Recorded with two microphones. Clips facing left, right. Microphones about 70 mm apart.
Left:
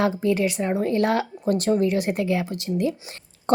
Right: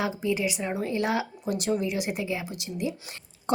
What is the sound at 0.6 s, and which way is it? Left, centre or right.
Speech, left.